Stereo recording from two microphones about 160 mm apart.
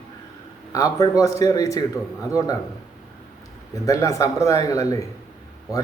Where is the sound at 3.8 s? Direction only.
20° left (ahead or behind).